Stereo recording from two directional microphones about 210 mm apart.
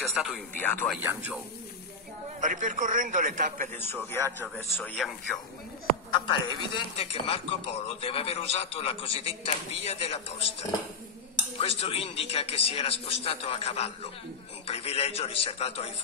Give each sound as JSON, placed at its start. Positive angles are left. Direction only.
{"t": 0.0, "sound": "speech", "side_deg": 0}
{"t": 1.0, "sound": "speech", "side_deg": -5}
{"t": 2.4, "sound": "a man's voice", "side_deg": -35}
{"t": 3.8, "sound": "speech", "side_deg": 10}
{"t": 6.1, "sound": "a man's voice", "side_deg": 20}
{"t": 11.5, "sound": "a man's voice", "side_deg": 30}